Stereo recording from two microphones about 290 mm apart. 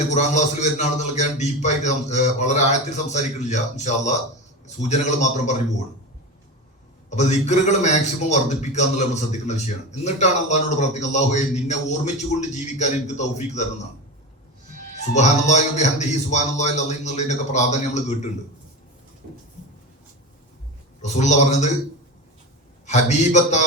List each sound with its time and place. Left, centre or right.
0.1 s a man's voice: left
7.2 s a man's voice: left
14.9 s a man's voice: left
21.0 s a man's voice: left
22.9 s a man's voice: left